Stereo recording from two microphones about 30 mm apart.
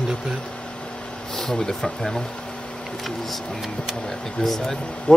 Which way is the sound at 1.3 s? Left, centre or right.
Centre.